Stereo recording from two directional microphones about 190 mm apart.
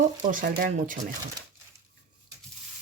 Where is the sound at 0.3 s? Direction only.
45° right (ahead or behind).